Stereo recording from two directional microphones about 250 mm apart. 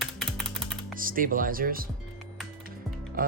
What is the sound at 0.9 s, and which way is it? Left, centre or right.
Speech, right.